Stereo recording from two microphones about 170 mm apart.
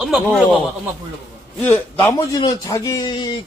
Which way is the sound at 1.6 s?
10° left (ahead or behind).